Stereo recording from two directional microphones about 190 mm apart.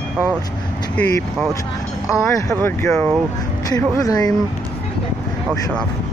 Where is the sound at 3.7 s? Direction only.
20° left (ahead or behind).